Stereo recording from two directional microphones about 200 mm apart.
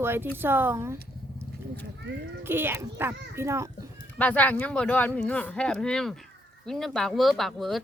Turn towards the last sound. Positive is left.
turn(degrees=0)  # may be behind; listen again after turning